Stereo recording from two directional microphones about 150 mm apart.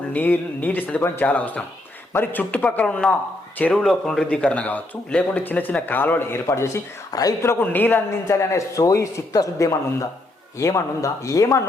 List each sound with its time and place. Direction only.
0.1 s speech: 10° left (ahead or behind)